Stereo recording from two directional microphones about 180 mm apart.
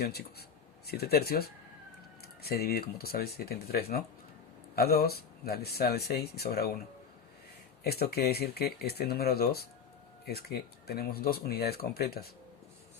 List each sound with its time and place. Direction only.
0.0 s speech: 60° left (ahead or behind)
7.9 s speech: 60° left (ahead or behind)
10.8 s speech: 60° left (ahead or behind)